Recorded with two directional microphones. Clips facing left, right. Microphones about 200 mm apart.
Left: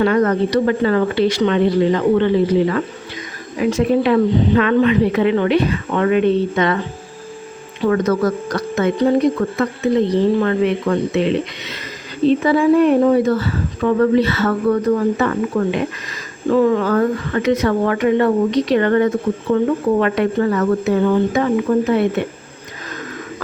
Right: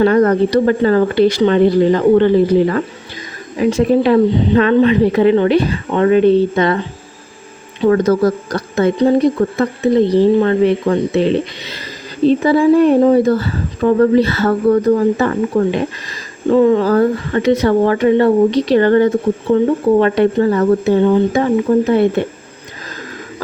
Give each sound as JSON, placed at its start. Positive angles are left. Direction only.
{"t": 0.0, "sound": "speech", "side_deg": -35}
{"t": 3.6, "sound": "speech", "side_deg": -30}
{"t": 7.9, "sound": "speech", "side_deg": -35}
{"t": 10.4, "sound": "speech", "side_deg": -35}